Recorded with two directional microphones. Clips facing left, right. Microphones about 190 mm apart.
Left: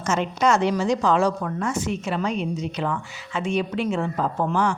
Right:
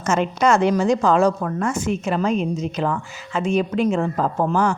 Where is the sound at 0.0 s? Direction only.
50° right (ahead or behind).